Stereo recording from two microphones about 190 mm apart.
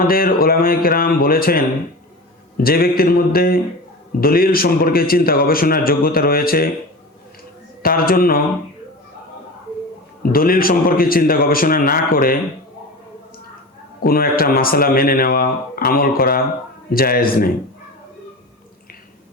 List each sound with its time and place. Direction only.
0.0 s a man's voice: 50° left (ahead or behind)
7.8 s a man's voice: 50° left (ahead or behind)
10.3 s a man's voice: 50° left (ahead or behind)
14.0 s a man's voice: 50° left (ahead or behind)